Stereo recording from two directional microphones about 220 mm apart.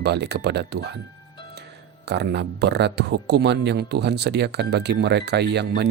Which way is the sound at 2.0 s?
50° right (ahead or behind).